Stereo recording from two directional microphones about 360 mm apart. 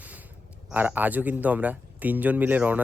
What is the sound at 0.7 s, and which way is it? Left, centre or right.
Speech, centre.